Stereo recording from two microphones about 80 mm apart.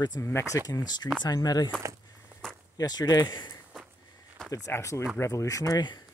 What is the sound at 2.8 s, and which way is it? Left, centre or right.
Speech, left.